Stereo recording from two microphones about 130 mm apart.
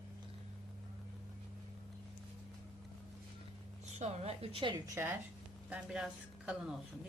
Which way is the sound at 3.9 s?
60° right (ahead or behind).